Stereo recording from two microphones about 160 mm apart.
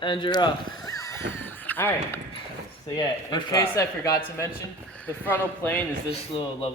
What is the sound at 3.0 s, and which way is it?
Speech, 25° left (ahead or behind).